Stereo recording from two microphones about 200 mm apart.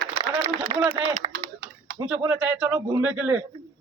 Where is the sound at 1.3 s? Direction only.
60° right (ahead or behind).